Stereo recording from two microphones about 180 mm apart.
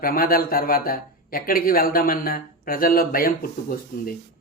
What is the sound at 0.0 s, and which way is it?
Speech, 55° left (ahead or behind).